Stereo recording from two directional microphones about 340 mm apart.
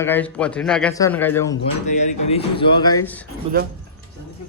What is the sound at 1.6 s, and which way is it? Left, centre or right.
Speech, left.